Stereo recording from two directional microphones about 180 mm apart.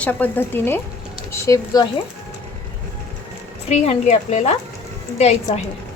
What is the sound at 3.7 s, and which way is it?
Speech, 40° left (ahead or behind).